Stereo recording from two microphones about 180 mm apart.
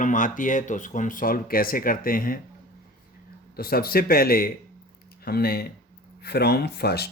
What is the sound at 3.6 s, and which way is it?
Speech, 55° left (ahead or behind).